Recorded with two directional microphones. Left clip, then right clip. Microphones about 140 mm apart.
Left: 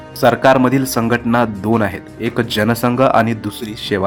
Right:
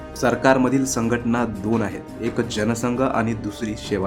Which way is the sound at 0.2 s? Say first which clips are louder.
Left 7 dB; 40° left (ahead or behind).